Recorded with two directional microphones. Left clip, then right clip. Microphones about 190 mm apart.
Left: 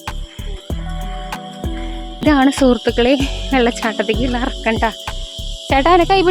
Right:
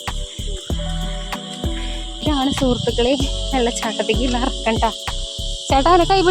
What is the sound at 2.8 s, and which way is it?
Speech, 25° left (ahead or behind).